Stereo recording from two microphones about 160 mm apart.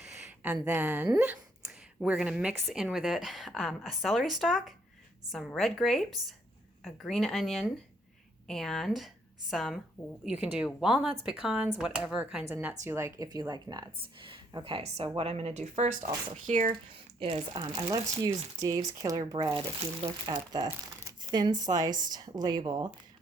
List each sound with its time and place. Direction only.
0.4 s speech: 10° right (ahead or behind)
1.2 s a sound: 5° right (ahead or behind)
2.7 s a woman's voice: centre (ahead or behind); by 16.7 s 55° right (ahead or behind)
17.2 s a woman's voice: 35° right (ahead or behind)
17.6 s speech: 20° right (ahead or behind)
20.0 s a woman's voice: 40° right (ahead or behind)
20.6 s speech: 25° right (ahead or behind)